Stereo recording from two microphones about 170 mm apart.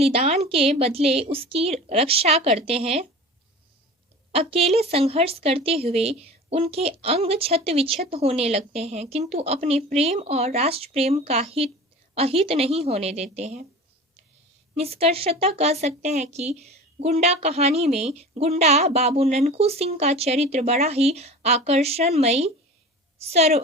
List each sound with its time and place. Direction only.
0.0 s a sound: 35° right (ahead or behind)
0.8 s a woman's voice: 35° right (ahead or behind)
4.3 s a woman's voice: 35° right (ahead or behind)
14.8 s a woman's voice: 35° right (ahead or behind)